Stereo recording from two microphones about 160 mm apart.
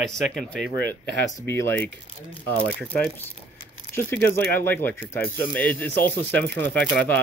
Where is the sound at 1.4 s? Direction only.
15° left (ahead or behind).